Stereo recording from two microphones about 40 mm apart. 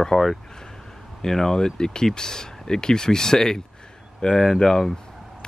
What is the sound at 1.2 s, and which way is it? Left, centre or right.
Speech, centre.